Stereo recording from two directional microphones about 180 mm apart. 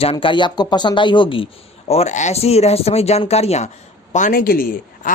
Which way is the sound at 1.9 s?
40° left (ahead or behind).